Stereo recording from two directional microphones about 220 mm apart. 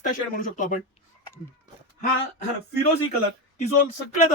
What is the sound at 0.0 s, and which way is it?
Speech, 35° left (ahead or behind).